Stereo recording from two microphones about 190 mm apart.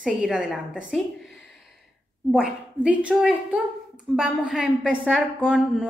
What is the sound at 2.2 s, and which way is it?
Speech, 5° right (ahead or behind).